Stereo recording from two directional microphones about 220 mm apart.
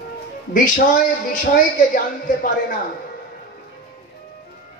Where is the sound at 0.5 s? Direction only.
35° left (ahead or behind).